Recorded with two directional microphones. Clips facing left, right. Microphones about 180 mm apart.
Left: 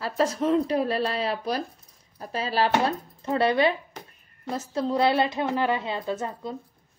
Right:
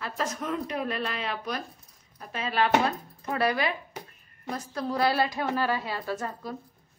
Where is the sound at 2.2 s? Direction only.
35° left (ahead or behind).